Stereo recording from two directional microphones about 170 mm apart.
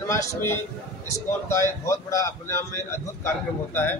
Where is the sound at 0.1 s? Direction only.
20° left (ahead or behind).